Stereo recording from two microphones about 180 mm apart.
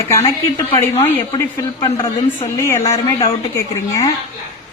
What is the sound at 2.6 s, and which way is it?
Speech, 15° left (ahead or behind).